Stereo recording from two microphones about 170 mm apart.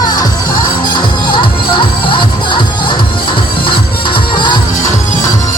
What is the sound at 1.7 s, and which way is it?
Music, 30° left (ahead or behind).